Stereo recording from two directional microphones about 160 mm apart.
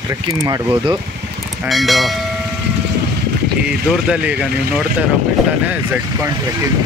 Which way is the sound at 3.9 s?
5° right (ahead or behind).